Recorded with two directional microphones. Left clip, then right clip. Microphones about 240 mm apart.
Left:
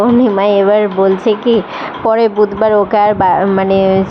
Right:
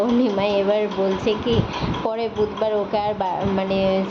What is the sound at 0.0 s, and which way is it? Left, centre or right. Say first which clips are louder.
Speech: left 9 dB; left.